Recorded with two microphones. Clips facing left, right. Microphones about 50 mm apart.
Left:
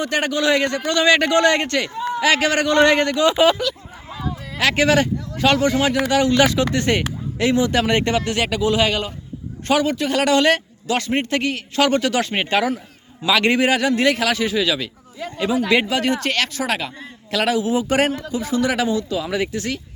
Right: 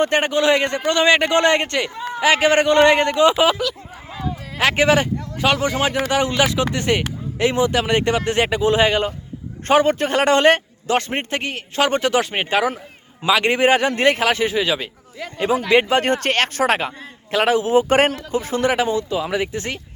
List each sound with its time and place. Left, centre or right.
0.0 s a man's voice: right
3.3 s speech: centre
4.5 s a man's voice: right
7.3 s a man's voice: right
7.7 s speech: centre
8.2 s a man's voice: right
13.6 s a man's voice: right
15.2 s speech: right
16.0 s speech: right
17.3 s a man's voice: right
17.6 s a man's voice: right